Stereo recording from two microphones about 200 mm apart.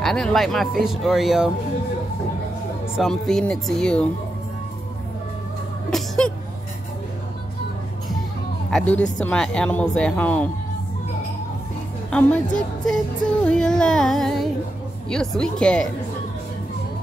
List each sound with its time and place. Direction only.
0.0 s speech: centre (ahead or behind)
3.0 s speech: centre (ahead or behind)
5.9 s music: 5° left (ahead or behind)
8.6 s a woman's voice: 5° left (ahead or behind)
12.1 s a woman's voice: 5° left (ahead or behind)
13.4 s speech: 5° left (ahead or behind)